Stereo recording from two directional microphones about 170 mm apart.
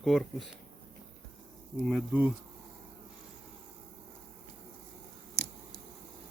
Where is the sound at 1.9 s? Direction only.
5° right (ahead or behind).